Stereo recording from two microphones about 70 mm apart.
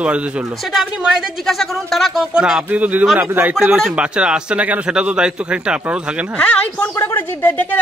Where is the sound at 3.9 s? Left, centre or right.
Centre.